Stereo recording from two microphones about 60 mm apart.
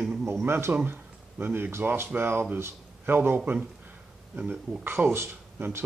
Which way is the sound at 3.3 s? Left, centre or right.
Right.